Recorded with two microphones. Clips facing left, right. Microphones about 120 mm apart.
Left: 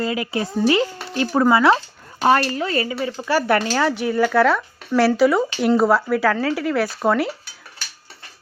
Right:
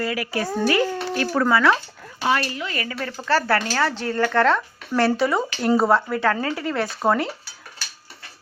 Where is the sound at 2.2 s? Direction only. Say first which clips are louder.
Left 6 dB; 40° left (ahead or behind).